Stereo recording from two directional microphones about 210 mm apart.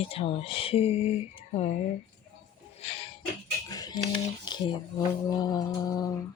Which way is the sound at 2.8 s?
30° left (ahead or behind).